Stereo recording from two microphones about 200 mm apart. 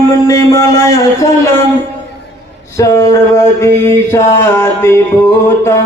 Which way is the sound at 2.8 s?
15° left (ahead or behind).